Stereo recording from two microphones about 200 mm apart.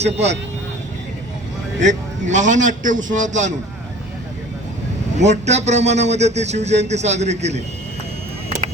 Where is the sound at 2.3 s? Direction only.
35° right (ahead or behind).